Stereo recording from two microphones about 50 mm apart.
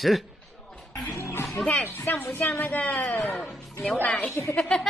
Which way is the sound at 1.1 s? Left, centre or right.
Left.